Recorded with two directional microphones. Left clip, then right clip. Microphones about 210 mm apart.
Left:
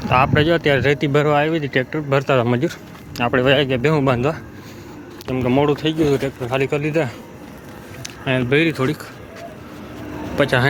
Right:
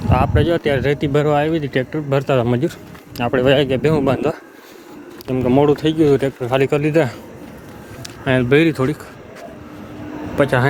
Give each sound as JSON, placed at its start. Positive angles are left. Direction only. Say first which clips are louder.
{"t": 0.0, "sound": "speech", "louder": "left 2 dB", "side_deg": -10}
{"t": 8.2, "sound": "speech", "louder": "right 3 dB", "side_deg": -50}
{"t": 10.3, "sound": "speech", "louder": "right 1 dB", "side_deg": -10}